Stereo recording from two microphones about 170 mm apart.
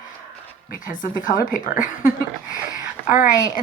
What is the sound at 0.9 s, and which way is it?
Speech, 50° left (ahead or behind).